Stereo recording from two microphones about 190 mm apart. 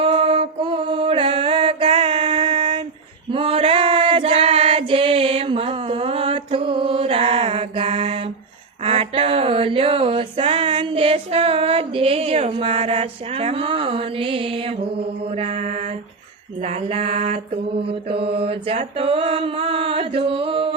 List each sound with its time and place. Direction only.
0.0 s music: 30° right (ahead or behind)
3.3 s female singing: 30° right (ahead or behind)
8.8 s a sound: 30° right (ahead or behind)
15.3 s mantra: 35° right (ahead or behind)